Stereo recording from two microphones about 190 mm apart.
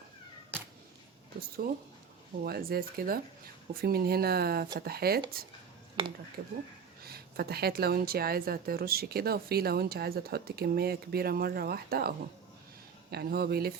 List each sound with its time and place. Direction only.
1.4 s a woman's voice: 50° right (ahead or behind)
6.0 s speech: 25° right (ahead or behind)
7.0 s a woman's voice: 55° right (ahead or behind)